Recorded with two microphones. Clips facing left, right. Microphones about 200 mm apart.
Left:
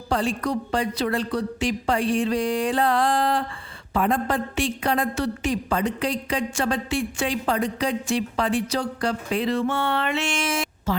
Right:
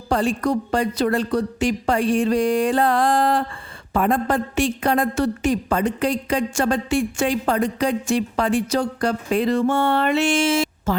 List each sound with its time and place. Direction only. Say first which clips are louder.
0.1 s a woman's voice: right 4 dB; 45° right (ahead or behind); by 10.7 s 25° right (ahead or behind)
10.9 s speech: right 1 dB; 50° right (ahead or behind)